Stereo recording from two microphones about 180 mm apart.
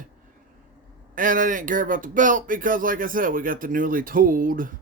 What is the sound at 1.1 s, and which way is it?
Speech, 50° right (ahead or behind).